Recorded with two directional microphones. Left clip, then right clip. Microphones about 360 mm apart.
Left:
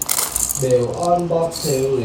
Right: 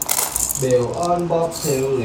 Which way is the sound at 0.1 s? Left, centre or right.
Centre.